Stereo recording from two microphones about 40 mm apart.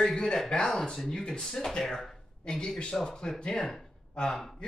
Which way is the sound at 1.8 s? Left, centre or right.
Centre.